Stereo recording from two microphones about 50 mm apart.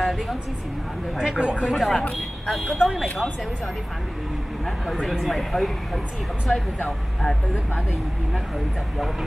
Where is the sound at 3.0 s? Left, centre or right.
Left.